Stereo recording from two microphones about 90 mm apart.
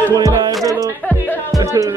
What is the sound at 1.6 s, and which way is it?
Music, 35° right (ahead or behind).